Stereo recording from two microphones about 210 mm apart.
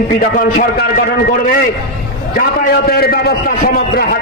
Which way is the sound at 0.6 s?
45° left (ahead or behind).